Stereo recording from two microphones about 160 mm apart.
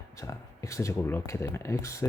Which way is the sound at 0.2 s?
20° left (ahead or behind).